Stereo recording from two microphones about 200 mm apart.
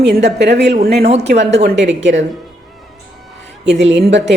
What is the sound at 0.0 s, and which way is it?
Speech, 60° right (ahead or behind).